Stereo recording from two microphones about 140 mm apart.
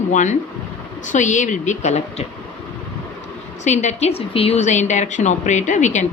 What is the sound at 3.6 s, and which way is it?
A woman's voice, 55° left (ahead or behind).